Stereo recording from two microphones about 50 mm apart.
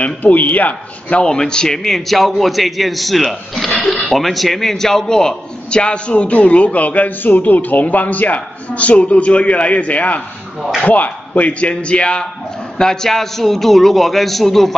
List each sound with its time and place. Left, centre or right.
0.0 s a man's voice: left; by 14.7 s centre